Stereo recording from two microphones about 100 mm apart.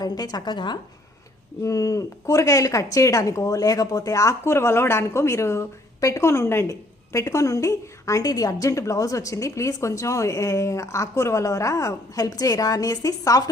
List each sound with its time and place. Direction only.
0.0 s a woman's voice: 40° left (ahead or behind)
1.6 s a woman's voice: 35° left (ahead or behind)